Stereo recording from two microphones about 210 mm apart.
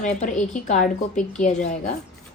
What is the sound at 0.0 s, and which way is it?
A woman's voice, 35° left (ahead or behind).